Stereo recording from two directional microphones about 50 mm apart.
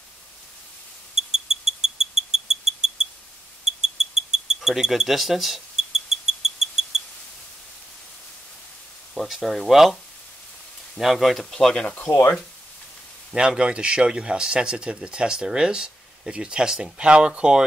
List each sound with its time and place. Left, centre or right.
1.1 s a sound: centre
9.3 s speech: centre
11.0 s speech: centre
11.5 s speech: centre
13.3 s speech: centre